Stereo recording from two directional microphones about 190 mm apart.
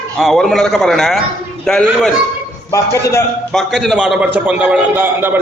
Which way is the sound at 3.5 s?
Centre (ahead or behind).